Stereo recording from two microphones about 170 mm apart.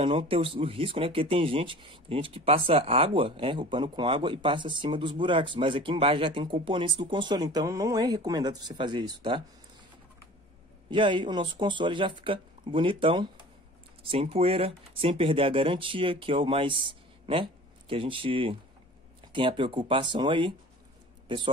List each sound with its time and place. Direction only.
0.0 s speech: 30° right (ahead or behind)
10.9 s speech: 30° right (ahead or behind)